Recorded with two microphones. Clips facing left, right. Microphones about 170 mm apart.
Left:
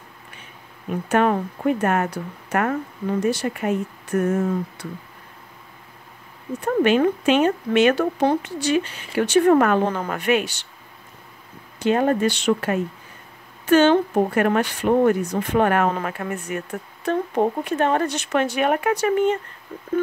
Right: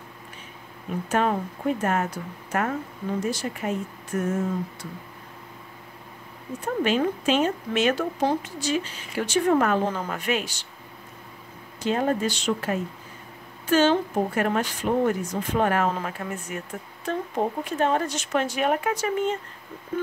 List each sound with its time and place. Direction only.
1.0 s speech: 60° left (ahead or behind)
6.6 s speech: 65° left (ahead or behind)
11.8 s speech: 65° left (ahead or behind)